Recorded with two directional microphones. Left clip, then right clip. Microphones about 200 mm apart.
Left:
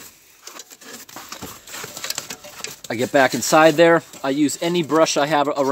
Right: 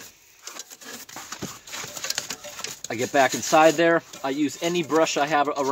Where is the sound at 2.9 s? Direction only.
40° left (ahead or behind).